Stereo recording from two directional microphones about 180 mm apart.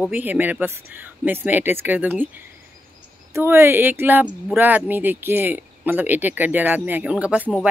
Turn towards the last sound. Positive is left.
turn(degrees=-5)  # may be behind; listen again after turning